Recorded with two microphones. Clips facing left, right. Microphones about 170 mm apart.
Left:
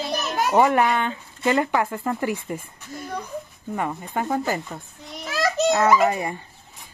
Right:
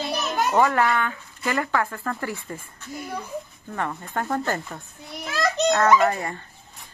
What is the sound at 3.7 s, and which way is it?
A child's voice, 15° left (ahead or behind).